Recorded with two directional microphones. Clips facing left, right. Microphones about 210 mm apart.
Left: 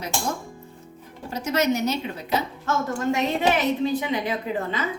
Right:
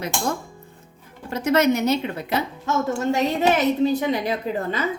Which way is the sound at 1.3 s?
60° right (ahead or behind).